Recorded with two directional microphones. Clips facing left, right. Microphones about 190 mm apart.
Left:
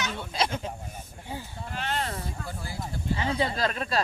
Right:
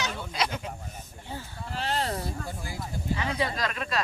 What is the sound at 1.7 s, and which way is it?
Speech, 30° right (ahead or behind).